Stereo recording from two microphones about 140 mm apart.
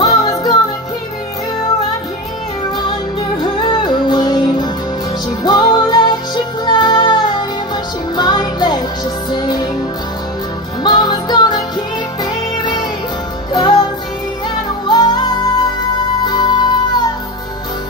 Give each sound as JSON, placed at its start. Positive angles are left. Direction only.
{"t": 0.0, "sound": "music", "side_deg": 25}
{"t": 3.3, "sound": "music", "side_deg": 35}
{"t": 10.8, "sound": "music", "side_deg": 30}
{"t": 13.5, "sound": "music", "side_deg": 30}
{"t": 14.9, "sound": "music", "side_deg": 30}